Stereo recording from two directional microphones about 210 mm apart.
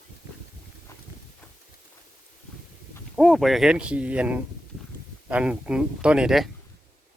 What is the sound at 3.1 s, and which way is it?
Speech, centre (ahead or behind).